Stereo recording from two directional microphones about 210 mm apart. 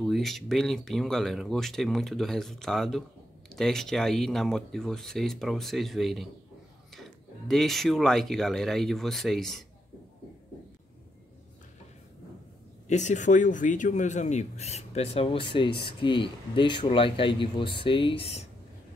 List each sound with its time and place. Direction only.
0.0 s speech: centre (ahead or behind)
12.8 s speech: 35° left (ahead or behind)